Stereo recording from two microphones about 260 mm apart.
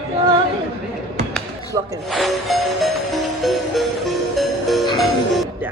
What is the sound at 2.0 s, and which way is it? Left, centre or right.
Music, centre.